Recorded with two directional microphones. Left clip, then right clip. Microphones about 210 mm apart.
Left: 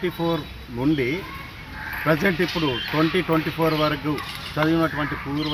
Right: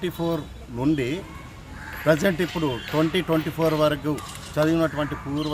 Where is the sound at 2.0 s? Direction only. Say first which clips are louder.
Even; 20° right (ahead or behind).